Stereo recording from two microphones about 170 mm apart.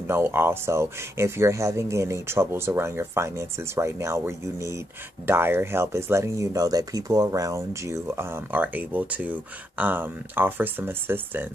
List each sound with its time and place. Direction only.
0.0 s speech: 15° right (ahead or behind)